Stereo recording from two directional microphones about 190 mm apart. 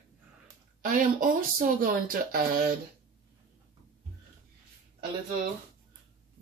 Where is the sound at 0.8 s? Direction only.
45° right (ahead or behind).